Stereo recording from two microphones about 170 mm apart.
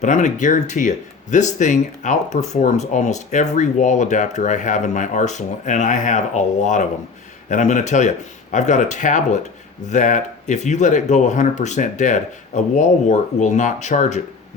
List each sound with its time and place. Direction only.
0.0 s speech: 45° left (ahead or behind)